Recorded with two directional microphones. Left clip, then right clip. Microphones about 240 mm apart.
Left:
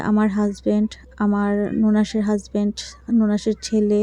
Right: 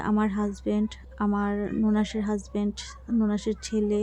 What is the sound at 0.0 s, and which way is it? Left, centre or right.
Speech, centre.